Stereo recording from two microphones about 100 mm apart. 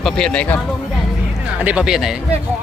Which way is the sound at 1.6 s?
10° right (ahead or behind).